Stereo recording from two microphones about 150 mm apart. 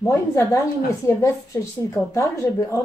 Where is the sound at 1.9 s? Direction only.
20° left (ahead or behind).